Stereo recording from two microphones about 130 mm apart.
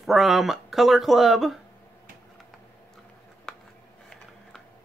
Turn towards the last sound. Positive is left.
turn(degrees=5)  # may be behind; listen again after turning